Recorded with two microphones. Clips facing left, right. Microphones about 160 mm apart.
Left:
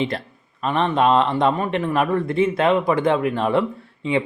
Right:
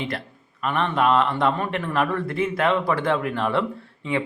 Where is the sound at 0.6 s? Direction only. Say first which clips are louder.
Left 3 dB; 20° left (ahead or behind).